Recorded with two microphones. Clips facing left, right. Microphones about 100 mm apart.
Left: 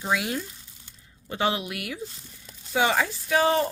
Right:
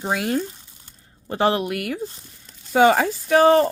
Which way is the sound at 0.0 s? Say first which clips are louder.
Right 5 dB; 45° right (ahead or behind).